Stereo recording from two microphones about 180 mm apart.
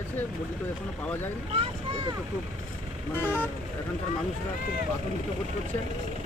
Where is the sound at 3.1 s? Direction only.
10° left (ahead or behind).